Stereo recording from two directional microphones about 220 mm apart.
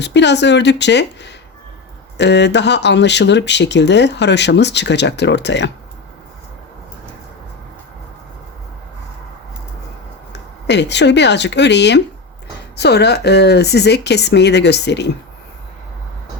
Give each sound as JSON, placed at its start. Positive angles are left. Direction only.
{"t": 0.0, "sound": "speech", "side_deg": 50}
{"t": 10.7, "sound": "speech", "side_deg": 50}